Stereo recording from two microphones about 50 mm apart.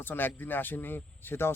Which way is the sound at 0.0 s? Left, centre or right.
Left.